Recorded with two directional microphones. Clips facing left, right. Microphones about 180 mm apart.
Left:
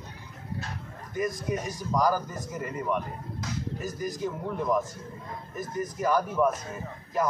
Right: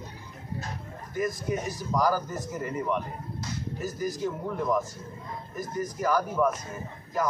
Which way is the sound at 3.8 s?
15° left (ahead or behind).